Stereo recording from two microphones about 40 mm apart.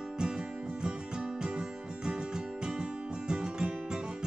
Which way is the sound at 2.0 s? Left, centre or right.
Centre.